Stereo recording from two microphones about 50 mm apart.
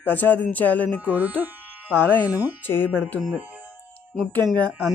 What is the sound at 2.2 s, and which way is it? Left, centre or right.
Speech, right.